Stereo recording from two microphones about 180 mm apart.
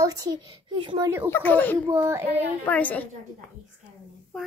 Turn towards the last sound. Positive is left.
turn(degrees=0)  # may be behind; listen again after turning